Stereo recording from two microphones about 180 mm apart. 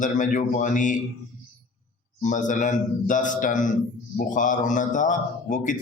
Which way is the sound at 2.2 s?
45° left (ahead or behind).